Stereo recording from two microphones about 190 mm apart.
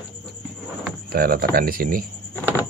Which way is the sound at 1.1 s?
55° right (ahead or behind).